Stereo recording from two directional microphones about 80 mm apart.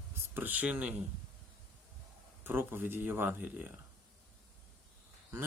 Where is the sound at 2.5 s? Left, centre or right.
Right.